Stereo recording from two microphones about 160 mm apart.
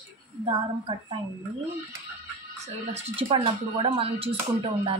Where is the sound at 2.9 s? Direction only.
40° right (ahead or behind).